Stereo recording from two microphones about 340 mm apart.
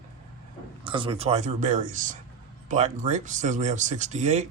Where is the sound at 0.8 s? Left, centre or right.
Centre.